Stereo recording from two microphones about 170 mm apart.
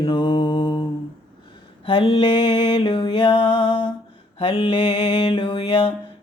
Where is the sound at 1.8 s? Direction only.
30° left (ahead or behind).